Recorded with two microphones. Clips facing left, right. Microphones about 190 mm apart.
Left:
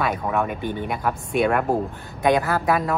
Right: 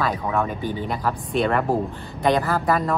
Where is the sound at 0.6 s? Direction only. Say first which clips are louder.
Even; 60° left (ahead or behind).